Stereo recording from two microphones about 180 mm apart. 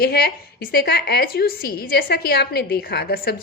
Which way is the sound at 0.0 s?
60° left (ahead or behind).